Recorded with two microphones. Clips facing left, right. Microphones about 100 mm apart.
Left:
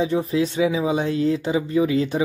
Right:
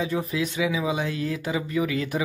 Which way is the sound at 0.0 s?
25° left (ahead or behind).